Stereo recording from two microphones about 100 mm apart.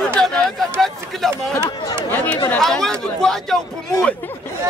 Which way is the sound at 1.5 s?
35° left (ahead or behind).